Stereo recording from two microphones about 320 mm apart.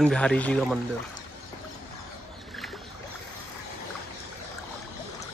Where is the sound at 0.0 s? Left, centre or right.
Centre.